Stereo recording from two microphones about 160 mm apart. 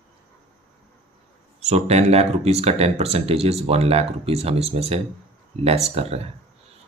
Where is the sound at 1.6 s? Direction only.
40° right (ahead or behind).